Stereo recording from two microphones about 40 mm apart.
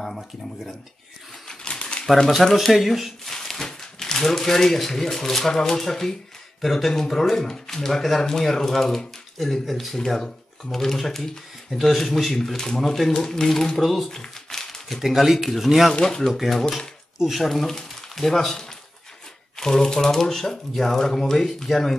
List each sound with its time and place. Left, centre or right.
0.0 s speech: centre
1.5 s typewriter: left
2.6 s speech: centre
3.3 s speech: centre
9.9 s speech: centre
13.7 s speech: centre
14.1 s crumpling: centre
15.0 s speech: centre
15.9 s speech: left
16.3 s speech: centre
17.8 s a sound: centre
19.5 s speech: centre